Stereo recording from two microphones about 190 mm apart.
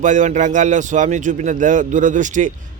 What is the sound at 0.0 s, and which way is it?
Speech, 40° right (ahead or behind).